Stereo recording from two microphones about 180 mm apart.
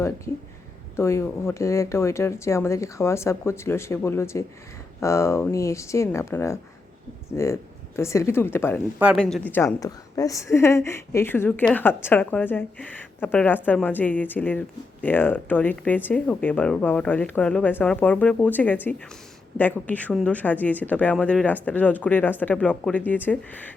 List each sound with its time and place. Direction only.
0.9 s speech: 15° left (ahead or behind)